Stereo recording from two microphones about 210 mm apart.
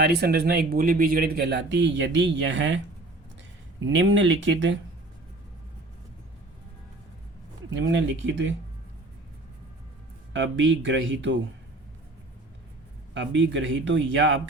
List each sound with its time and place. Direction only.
0.0 s a man's voice: 50° right (ahead or behind)
3.8 s speech: 65° right (ahead or behind)
7.8 s speech: 60° right (ahead or behind)
10.3 s speech: 60° right (ahead or behind)
13.1 s speech: 60° right (ahead or behind)